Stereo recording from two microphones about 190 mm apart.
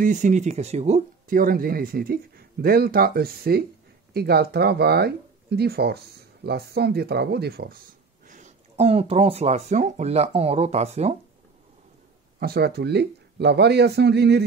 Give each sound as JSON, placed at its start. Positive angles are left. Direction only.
{"t": 0.0, "sound": "speech", "side_deg": -40}
{"t": 12.4, "sound": "a man's voice", "side_deg": -55}